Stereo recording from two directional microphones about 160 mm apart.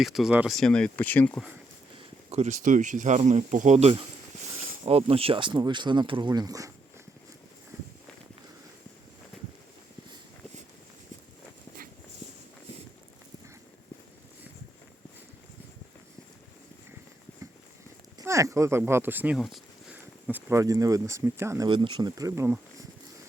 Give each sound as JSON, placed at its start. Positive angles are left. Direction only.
{"t": 0.0, "sound": "speech", "side_deg": 0}
{"t": 2.3, "sound": "speech", "side_deg": -45}
{"t": 18.2, "sound": "speech", "side_deg": -20}
{"t": 19.4, "sound": "speech", "side_deg": 0}
{"t": 21.7, "sound": "speech", "side_deg": -30}